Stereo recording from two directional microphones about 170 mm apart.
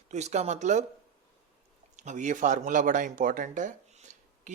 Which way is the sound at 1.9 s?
45° right (ahead or behind).